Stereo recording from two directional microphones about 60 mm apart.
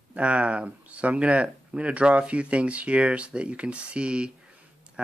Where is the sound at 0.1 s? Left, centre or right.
Right.